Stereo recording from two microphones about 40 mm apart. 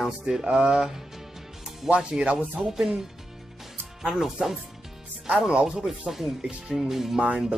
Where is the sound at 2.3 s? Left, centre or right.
Right.